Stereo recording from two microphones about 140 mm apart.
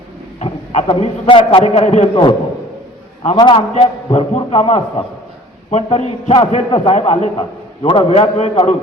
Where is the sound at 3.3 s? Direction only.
35° left (ahead or behind).